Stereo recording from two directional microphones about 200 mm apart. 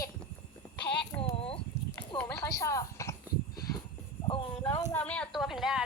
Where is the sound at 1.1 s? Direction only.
25° left (ahead or behind).